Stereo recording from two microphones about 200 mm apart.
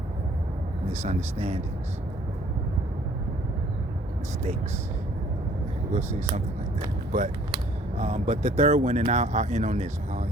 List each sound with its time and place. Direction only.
0.9 s speech: 35° right (ahead or behind)
6.1 s speech: 35° right (ahead or behind)